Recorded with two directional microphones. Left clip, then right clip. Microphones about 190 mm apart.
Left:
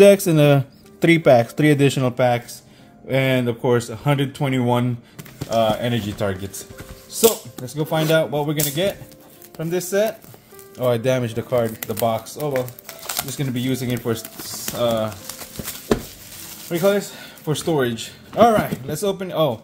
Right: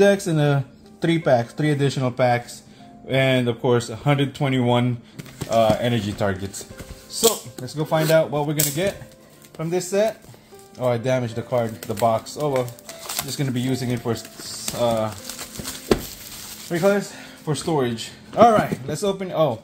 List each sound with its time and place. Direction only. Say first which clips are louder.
0.0 s speech: left 6 dB; 45° left (ahead or behind)
2.1 s speech: left 1 dB; 20° left (ahead or behind); by 6.5 s 5° left (ahead or behind)
7.7 s speech: even; 20° left (ahead or behind)
10.8 s speech: left 2 dB; 30° left (ahead or behind)
11.9 s speech: right 5 dB; 5° left (ahead or behind)
12.4 s speech: right 1 dB; 5° right (ahead or behind); by 15.0 s 15° left (ahead or behind)
16.7 s speech: left 1 dB; 5° left (ahead or behind)
17.5 s speech: left 2 dB; 30° left (ahead or behind)